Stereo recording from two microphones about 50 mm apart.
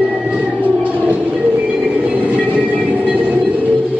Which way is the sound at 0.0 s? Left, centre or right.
Right.